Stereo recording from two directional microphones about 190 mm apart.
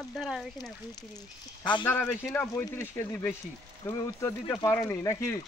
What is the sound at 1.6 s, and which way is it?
Speech, 25° left (ahead or behind).